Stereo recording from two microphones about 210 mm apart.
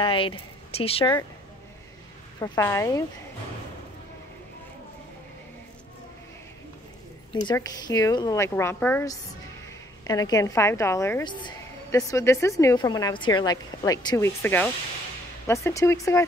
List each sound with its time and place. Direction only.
0.0 s speech: 25° left (ahead or behind)
2.4 s a woman's voice: 15° left (ahead or behind)
7.4 s a woman's voice: 20° left (ahead or behind)